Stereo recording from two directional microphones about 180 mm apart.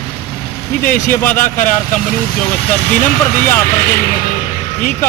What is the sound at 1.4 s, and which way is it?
Speech, 45° left (ahead or behind).